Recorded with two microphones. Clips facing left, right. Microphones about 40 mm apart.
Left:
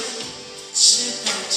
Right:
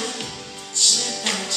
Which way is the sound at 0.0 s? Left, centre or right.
Right.